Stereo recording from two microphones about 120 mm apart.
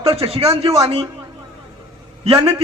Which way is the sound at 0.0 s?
55° right (ahead or behind).